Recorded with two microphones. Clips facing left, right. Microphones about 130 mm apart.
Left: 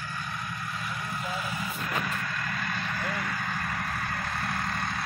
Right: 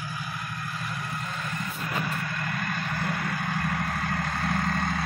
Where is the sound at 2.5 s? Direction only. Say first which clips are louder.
Right 2 dB; 45° right (ahead or behind).